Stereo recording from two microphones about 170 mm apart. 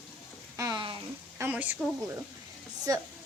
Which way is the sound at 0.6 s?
25° right (ahead or behind).